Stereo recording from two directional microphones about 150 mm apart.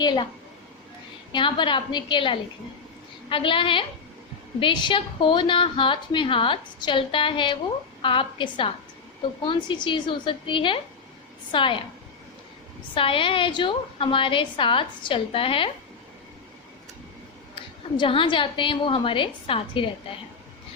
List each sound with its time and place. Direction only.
0.0 s a woman's voice: 30° left (ahead or behind)
1.3 s a woman's voice: 30° left (ahead or behind)
12.9 s a woman's voice: 35° left (ahead or behind)
17.5 s a woman's voice: 35° left (ahead or behind)